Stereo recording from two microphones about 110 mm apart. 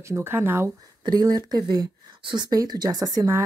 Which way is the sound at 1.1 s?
35° right (ahead or behind).